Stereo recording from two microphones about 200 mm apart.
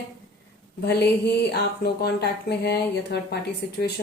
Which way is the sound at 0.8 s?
55° left (ahead or behind).